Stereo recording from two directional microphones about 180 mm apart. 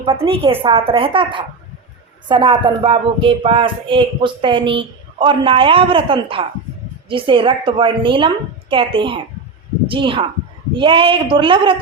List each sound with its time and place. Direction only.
0.0 s speech: 30° right (ahead or behind)